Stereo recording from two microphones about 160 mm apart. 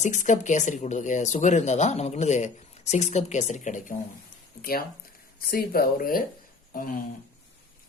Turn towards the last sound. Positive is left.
turn(degrees=60)  # may be behind; listen again after turning